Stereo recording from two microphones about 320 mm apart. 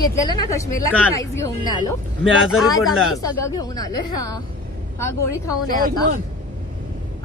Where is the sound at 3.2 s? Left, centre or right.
Centre.